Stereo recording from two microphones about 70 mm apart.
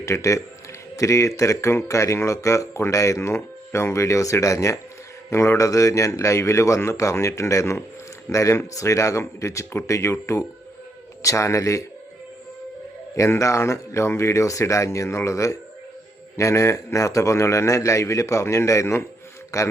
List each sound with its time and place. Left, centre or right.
0.0 s a man's voice: left
13.1 s a man's voice: left